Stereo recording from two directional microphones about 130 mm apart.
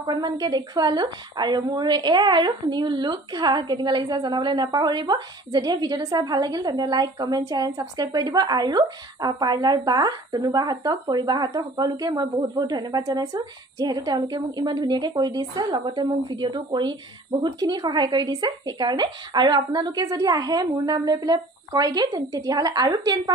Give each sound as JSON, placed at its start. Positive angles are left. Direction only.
{"t": 0.0, "sound": "a woman's voice", "side_deg": -30}